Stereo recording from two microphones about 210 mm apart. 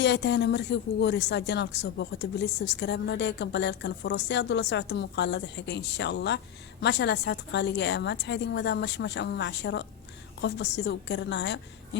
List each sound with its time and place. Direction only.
0.0 s a woman's voice: 55° left (ahead or behind)